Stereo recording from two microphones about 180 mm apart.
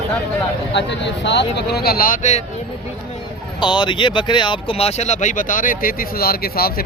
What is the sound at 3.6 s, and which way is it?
Speech, 25° left (ahead or behind).